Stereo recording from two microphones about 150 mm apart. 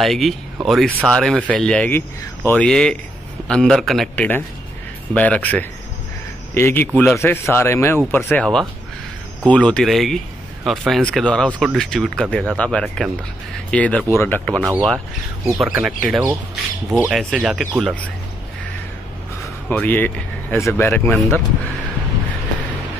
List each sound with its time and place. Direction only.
0.0 s speech: centre (ahead or behind)
9.5 s speech: 10° left (ahead or behind)
15.7 s speech: 5° right (ahead or behind)
19.7 s speech: 10° left (ahead or behind)